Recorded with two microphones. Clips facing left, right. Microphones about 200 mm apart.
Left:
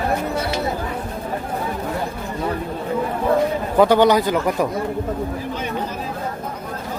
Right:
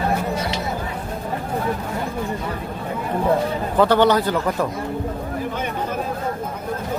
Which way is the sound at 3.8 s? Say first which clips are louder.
Left 2 dB; 15° left (ahead or behind).